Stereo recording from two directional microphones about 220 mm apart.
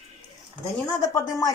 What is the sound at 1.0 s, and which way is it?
Speech, 15° left (ahead or behind).